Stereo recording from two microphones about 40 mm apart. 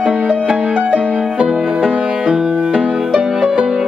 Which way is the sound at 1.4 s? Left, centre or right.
Centre.